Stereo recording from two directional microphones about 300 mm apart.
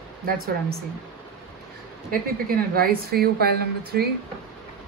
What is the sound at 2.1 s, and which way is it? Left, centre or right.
A woman's voice, right.